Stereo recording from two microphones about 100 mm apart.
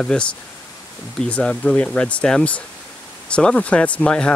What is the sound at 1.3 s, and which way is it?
Speech, 10° left (ahead or behind).